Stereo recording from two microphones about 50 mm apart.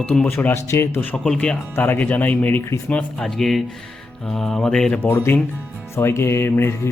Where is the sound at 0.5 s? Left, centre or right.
Left.